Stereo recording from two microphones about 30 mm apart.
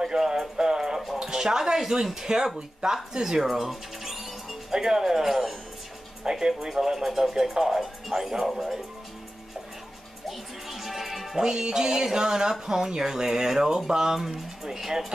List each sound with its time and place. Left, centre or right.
0.0 s music: right
1.2 s speech: centre
2.2 s music: right
3.4 s music: centre
4.7 s speech: centre
6.2 s music: right
6.7 s speech: centre
10.2 s music: centre
11.3 s music: right
13.7 s speech: centre